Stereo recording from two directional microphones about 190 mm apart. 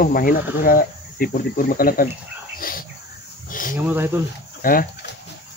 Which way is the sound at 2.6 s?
50° left (ahead or behind).